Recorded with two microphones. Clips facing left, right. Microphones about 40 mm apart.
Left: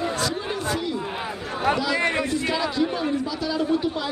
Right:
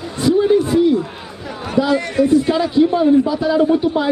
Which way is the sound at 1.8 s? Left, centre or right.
Right.